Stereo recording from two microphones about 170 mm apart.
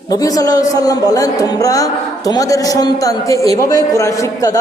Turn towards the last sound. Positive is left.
turn(degrees=20)  # may be behind; listen again after turning